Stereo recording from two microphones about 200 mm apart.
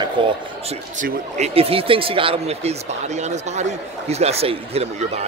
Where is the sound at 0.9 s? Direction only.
40° right (ahead or behind).